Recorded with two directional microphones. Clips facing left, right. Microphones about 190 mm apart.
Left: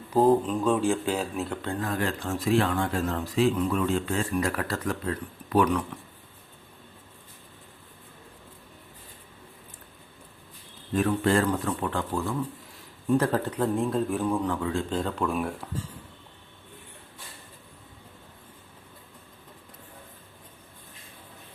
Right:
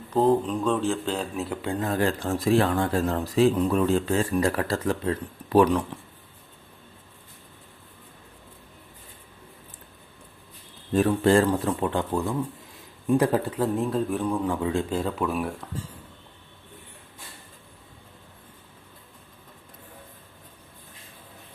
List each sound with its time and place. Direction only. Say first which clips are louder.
0.1 s speech: even; 5° left (ahead or behind)
1.6 s speech: right 3 dB; 15° right (ahead or behind)
1.9 s speech: right 6 dB; 30° right (ahead or behind)
10.9 s a man's voice: right 4 dB; 30° right (ahead or behind); by 14.4 s centre (ahead or behind)
14.4 s speech: right 3 dB; 15° right (ahead or behind)
14.8 s a man's voice: right 1 dB; 5° right (ahead or behind)